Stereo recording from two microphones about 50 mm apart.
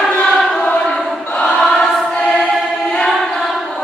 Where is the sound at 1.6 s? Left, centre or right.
Centre.